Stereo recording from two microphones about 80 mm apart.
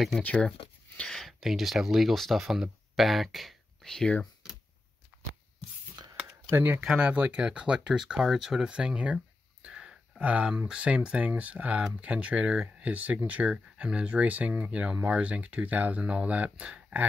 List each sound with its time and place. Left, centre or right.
0.2 s speech: centre
0.9 s speech: centre
5.1 s a sound: centre
6.5 s speech: right
6.8 s speech: centre